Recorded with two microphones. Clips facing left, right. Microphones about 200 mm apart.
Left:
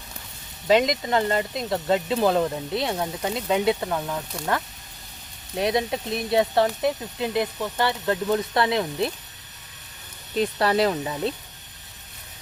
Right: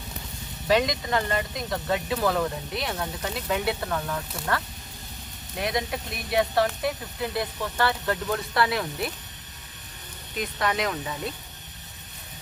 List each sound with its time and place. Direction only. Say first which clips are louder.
0.7 s speech: left 3 dB; 20° left (ahead or behind)
5.5 s speech: left 5 dB; 25° left (ahead or behind)
10.3 s speech: left 6 dB; 35° left (ahead or behind)